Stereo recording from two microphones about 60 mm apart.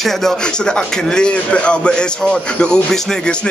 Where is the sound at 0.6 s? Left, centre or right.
Centre.